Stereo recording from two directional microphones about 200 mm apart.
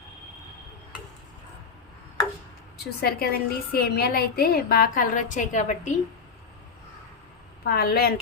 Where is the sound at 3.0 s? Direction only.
50° left (ahead or behind).